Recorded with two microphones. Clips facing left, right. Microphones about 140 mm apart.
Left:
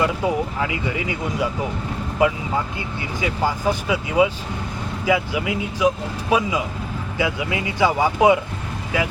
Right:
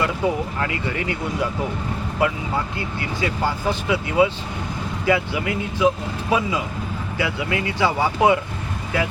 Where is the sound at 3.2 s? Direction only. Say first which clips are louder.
Left 1 dB; 10° left (ahead or behind).